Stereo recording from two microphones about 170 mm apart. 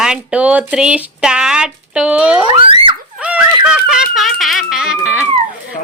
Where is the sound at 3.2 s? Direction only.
5° right (ahead or behind).